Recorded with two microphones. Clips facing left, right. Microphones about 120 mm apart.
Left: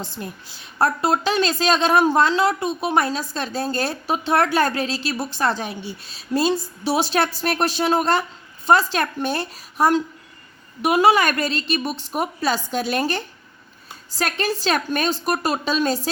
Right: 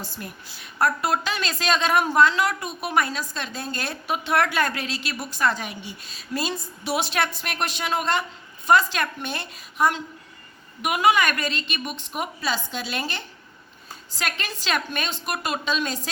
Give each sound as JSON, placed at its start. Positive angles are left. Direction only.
{"t": 0.0, "sound": "speech", "side_deg": 25}